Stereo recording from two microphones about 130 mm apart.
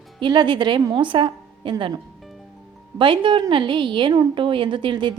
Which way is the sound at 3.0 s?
40° right (ahead or behind).